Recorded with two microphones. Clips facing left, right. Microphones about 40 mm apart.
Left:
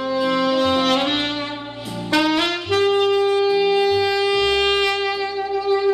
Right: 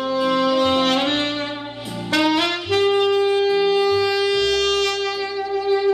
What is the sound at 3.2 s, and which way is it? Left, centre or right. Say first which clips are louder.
Shofar: even; centre.